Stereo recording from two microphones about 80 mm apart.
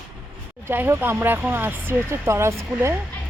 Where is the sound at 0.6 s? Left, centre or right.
Right.